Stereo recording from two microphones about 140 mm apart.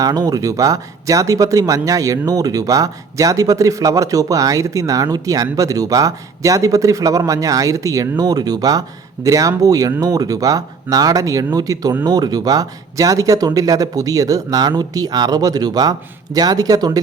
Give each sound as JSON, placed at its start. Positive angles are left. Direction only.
{"t": 0.0, "sound": "speech", "side_deg": -25}